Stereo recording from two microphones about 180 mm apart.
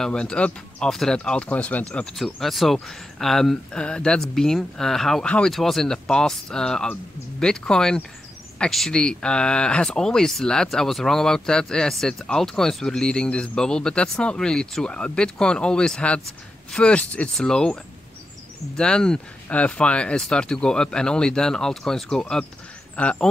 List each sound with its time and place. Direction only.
0.0 s speech: 5° left (ahead or behind)
18.8 s speech: 5° left (ahead or behind)